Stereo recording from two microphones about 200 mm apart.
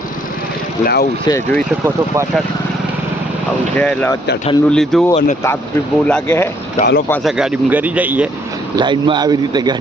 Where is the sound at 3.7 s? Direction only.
5° left (ahead or behind).